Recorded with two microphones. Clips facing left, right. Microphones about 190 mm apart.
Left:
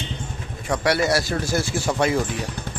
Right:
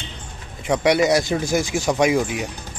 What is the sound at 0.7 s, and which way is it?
A man's voice, 20° right (ahead or behind).